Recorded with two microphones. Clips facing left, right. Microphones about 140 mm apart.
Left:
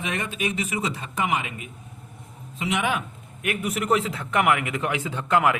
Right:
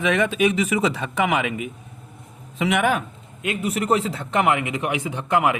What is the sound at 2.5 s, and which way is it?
Speech, 75° right (ahead or behind).